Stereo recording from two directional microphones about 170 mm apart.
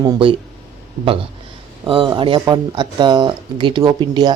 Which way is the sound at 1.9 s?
30° right (ahead or behind).